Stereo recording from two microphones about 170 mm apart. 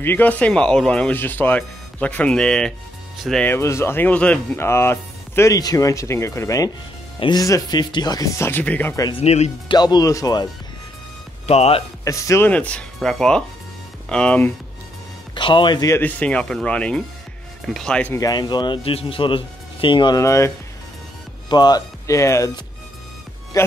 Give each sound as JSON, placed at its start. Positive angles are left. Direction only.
{"t": 0.0, "sound": "speech", "side_deg": 10}
{"t": 3.5, "sound": "speech", "side_deg": 15}
{"t": 9.2, "sound": "speech", "side_deg": 40}
{"t": 9.8, "sound": "speech", "side_deg": 25}
{"t": 11.4, "sound": "speech", "side_deg": 40}
{"t": 12.0, "sound": "speech", "side_deg": 20}
{"t": 15.3, "sound": "speech", "side_deg": 30}
{"t": 16.0, "sound": "speech", "side_deg": 10}
{"t": 18.1, "sound": "speech", "side_deg": 25}
{"t": 23.5, "sound": "speech", "side_deg": 20}